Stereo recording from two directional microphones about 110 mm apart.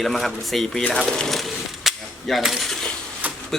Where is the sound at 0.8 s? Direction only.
5° left (ahead or behind).